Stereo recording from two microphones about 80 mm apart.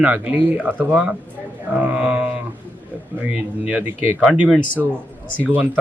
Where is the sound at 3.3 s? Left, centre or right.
Centre.